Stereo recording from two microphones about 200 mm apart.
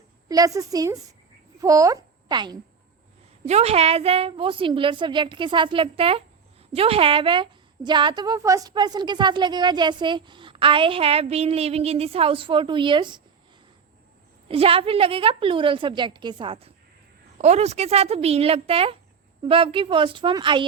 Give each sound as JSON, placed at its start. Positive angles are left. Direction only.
{"t": 0.3, "sound": "a woman's voice", "side_deg": -15}
{"t": 3.4, "sound": "a woman's voice", "side_deg": -35}
{"t": 14.4, "sound": "a woman's voice", "side_deg": -30}